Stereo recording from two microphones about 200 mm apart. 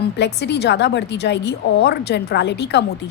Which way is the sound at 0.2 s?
60° left (ahead or behind).